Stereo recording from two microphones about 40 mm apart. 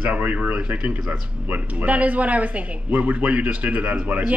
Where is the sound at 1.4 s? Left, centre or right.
Right.